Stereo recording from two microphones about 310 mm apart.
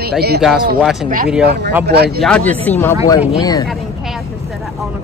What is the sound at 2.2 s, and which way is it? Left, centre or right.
Speech, centre.